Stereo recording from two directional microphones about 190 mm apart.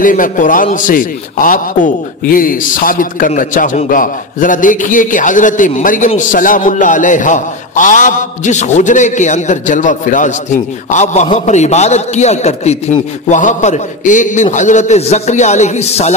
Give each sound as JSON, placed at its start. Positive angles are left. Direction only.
{"t": 0.0, "sound": "a man's voice", "side_deg": 45}